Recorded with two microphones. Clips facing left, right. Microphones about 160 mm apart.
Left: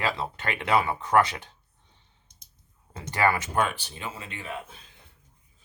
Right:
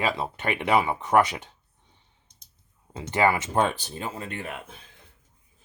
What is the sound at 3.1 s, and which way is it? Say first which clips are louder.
Speech: right 2 dB; 20° right (ahead or behind).